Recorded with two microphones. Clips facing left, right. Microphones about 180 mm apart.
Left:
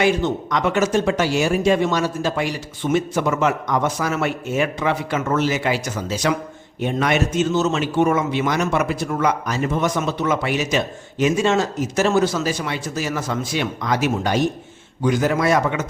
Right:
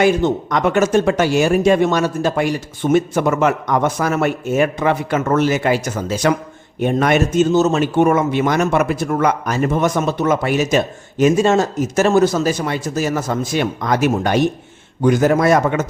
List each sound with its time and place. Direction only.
0.0 s a man's voice: 50° right (ahead or behind)